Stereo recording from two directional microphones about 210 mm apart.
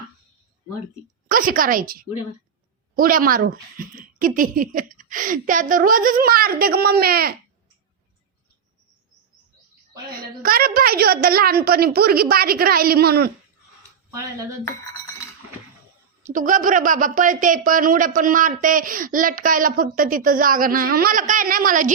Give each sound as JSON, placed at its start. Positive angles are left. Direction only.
{"t": 1.3, "sound": "speech", "side_deg": -40}
{"t": 10.1, "sound": "speech", "side_deg": -45}
{"t": 16.2, "sound": "speech", "side_deg": -40}